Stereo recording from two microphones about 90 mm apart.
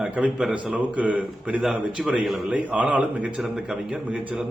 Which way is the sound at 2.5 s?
15° right (ahead or behind).